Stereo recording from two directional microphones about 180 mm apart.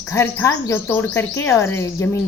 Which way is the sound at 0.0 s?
15° left (ahead or behind).